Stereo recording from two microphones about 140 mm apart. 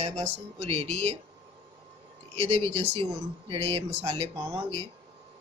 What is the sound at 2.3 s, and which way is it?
Speech, 45° right (ahead or behind).